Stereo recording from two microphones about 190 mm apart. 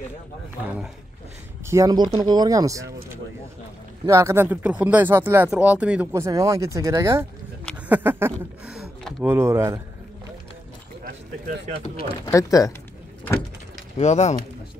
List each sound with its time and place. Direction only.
1.7 s speech: 20° right (ahead or behind)
4.0 s speech: 15° right (ahead or behind)
12.3 s speech: 15° left (ahead or behind)
13.9 s speech: 35° left (ahead or behind)